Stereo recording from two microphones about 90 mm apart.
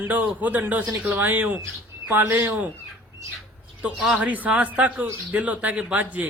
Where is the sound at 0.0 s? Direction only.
15° right (ahead or behind).